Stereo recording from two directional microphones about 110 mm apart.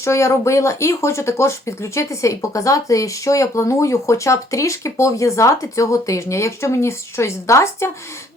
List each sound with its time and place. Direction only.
0.0 s speech: 25° left (ahead or behind)